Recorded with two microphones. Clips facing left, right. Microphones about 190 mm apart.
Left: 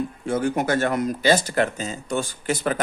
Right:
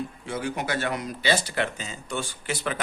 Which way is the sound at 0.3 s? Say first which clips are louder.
Left 8 dB; 45° left (ahead or behind).